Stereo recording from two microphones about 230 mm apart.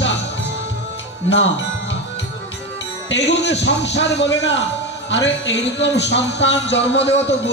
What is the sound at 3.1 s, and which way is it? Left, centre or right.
Speech, left.